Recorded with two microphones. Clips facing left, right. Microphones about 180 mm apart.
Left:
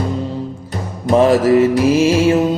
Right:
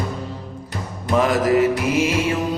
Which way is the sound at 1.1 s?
30° left (ahead or behind).